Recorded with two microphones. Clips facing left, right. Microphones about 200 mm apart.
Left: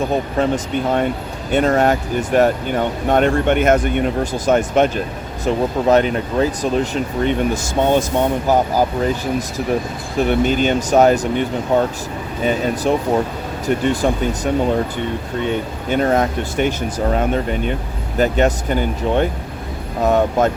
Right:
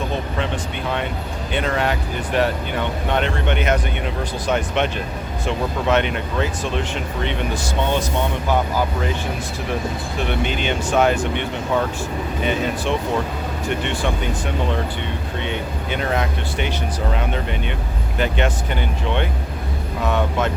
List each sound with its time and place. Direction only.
0.3 s speech: 45° left (ahead or behind)
10.2 s speech: 40° left (ahead or behind)